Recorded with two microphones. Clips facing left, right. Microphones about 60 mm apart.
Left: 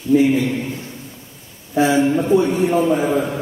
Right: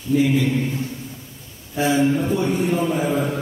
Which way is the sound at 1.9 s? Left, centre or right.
Left.